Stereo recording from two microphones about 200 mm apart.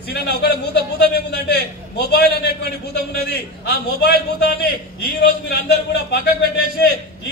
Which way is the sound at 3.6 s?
55° left (ahead or behind).